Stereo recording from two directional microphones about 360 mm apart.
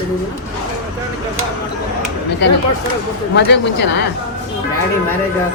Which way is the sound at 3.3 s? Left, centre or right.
Left.